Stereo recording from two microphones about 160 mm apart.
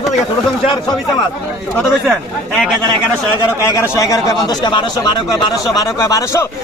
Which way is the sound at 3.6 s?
20° left (ahead or behind).